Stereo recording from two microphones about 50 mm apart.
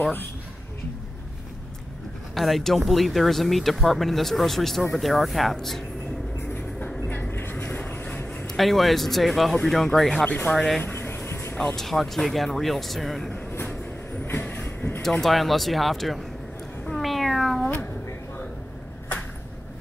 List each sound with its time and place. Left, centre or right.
2.3 s speech: centre
7.1 s vehicle: left
7.5 s vehicle: left
8.5 s speech: centre
10.2 s speech: left
10.8 s a sound: left
11.5 s speech: centre
14.2 s vehicle: left
15.0 s speech: centre
16.9 s cat: centre